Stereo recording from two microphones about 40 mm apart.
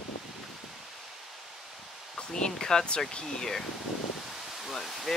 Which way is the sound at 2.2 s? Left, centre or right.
Centre.